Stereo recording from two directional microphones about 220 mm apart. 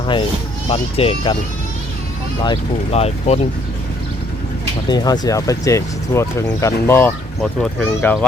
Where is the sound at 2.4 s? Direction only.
25° left (ahead or behind).